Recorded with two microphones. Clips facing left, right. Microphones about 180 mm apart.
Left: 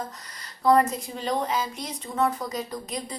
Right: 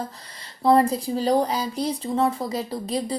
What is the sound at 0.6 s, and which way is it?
A woman's voice, 30° right (ahead or behind).